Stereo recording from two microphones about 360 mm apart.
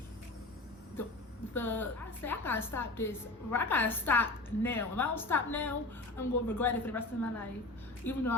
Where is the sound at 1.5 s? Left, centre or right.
Centre.